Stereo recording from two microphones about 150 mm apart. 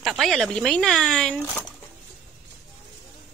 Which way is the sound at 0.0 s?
Centre (ahead or behind).